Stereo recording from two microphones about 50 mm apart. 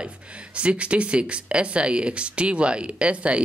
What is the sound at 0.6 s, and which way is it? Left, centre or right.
Speech, right.